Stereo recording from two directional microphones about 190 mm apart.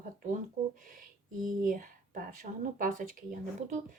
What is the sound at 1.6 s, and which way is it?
Speech, 45° right (ahead or behind).